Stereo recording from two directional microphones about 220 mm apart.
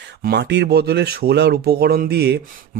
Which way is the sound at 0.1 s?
50° right (ahead or behind).